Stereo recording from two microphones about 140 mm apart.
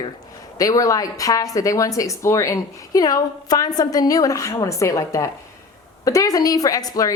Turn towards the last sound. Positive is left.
turn(degrees=25)  # may be behind; listen again after turning